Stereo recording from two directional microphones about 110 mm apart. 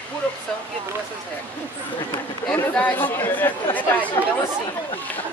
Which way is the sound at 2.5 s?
15° left (ahead or behind).